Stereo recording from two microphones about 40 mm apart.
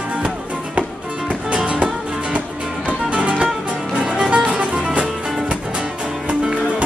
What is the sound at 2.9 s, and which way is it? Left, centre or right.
Music, right.